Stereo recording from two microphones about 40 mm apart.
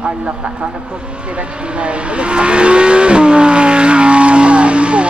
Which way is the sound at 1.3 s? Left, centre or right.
Right.